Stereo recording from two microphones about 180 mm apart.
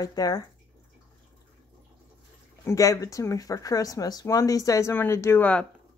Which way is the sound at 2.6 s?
20° left (ahead or behind).